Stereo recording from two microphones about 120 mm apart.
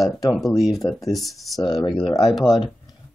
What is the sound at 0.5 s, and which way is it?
Speech, 30° left (ahead or behind).